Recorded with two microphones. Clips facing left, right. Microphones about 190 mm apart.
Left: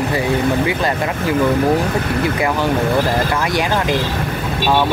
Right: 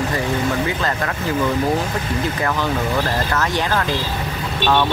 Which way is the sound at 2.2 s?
10° left (ahead or behind).